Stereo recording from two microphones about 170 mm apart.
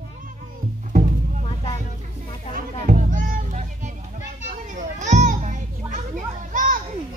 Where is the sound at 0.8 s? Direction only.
50° right (ahead or behind).